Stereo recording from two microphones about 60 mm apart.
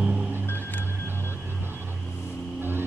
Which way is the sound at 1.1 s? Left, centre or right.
Right.